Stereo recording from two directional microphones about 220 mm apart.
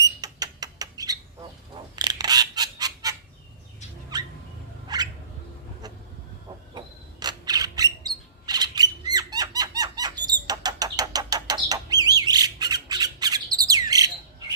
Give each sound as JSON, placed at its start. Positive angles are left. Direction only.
{"t": 0.2, "sound": "rodents", "side_deg": -15}
{"t": 2.0, "sound": "honk", "side_deg": -20}
{"t": 4.1, "sound": "rodents", "side_deg": -20}
{"t": 4.9, "sound": "bird", "side_deg": -15}
{"t": 5.8, "sound": "vehicle", "side_deg": -15}
{"t": 6.7, "sound": "a sound", "side_deg": -20}
{"t": 10.4, "sound": "bird", "side_deg": -20}